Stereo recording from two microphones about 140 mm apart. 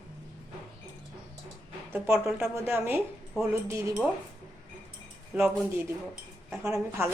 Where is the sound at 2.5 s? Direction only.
15° right (ahead or behind).